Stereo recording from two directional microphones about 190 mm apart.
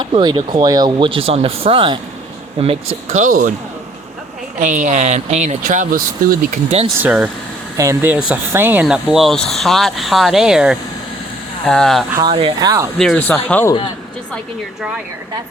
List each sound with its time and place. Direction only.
0.0 s speech: 20° right (ahead or behind)
3.1 s speech: 40° right (ahead or behind)
4.6 s speech: 40° right (ahead or behind)
6.5 s speech: 35° right (ahead or behind)
7.0 s speech: 10° right (ahead or behind)
12.1 s speech: 25° right (ahead or behind)
13.0 s speech: 5° left (ahead or behind)
14.8 s speech: 5° right (ahead or behind)